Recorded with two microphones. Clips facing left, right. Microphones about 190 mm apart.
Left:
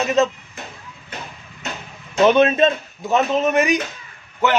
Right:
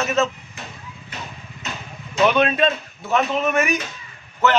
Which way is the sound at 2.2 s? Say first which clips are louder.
Left 4 dB; 25° left (ahead or behind).